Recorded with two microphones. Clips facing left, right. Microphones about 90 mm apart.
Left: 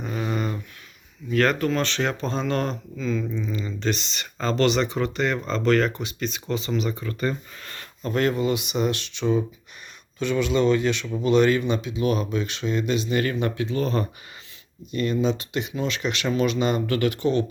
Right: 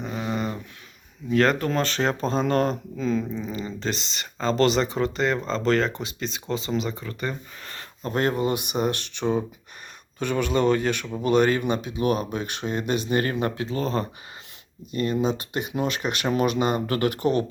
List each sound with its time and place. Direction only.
0.0 s a sound: 5° right (ahead or behind)
0.3 s a sound: 20° right (ahead or behind)
1.3 s speech: 30° right (ahead or behind)
7.0 s speech: 20° right (ahead or behind); by 12.8 s 50° right (ahead or behind)
12.9 s speech: 35° right (ahead or behind)
15.2 s speech: 40° right (ahead or behind)
16.6 s speech: 25° right (ahead or behind)
16.9 s speech: 40° right (ahead or behind)